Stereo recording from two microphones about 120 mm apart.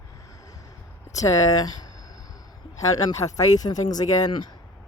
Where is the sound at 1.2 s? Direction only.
30° left (ahead or behind).